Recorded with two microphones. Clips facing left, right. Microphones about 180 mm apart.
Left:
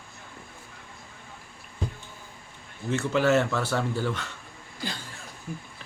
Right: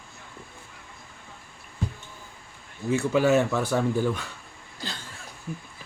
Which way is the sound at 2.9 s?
10° right (ahead or behind).